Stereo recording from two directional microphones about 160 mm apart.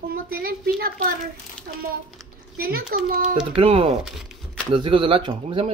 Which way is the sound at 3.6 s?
35° right (ahead or behind).